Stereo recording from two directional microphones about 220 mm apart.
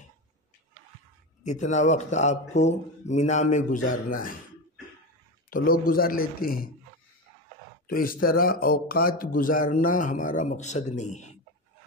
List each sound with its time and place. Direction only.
1.4 s speech: 30° left (ahead or behind)
5.5 s speech: 40° left (ahead or behind)
7.8 s speech: 40° left (ahead or behind)